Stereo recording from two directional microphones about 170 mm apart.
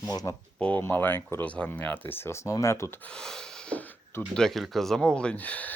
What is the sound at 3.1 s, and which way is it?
Gasp, 5° left (ahead or behind).